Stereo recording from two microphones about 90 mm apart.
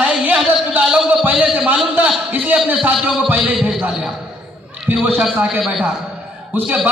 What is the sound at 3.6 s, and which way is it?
Speech, 10° right (ahead or behind).